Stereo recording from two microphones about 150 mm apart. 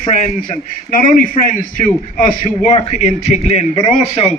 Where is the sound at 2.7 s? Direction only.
45° left (ahead or behind).